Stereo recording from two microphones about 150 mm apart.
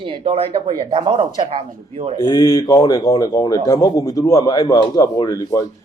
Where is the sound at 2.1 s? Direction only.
25° left (ahead or behind).